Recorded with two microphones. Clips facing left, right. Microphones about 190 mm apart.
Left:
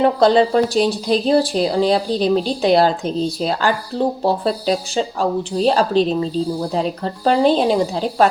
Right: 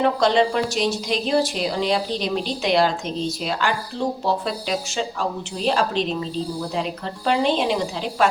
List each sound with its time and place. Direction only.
0.0 s speech: 35° left (ahead or behind)